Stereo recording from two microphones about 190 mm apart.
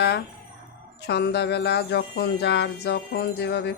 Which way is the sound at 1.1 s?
60° left (ahead or behind).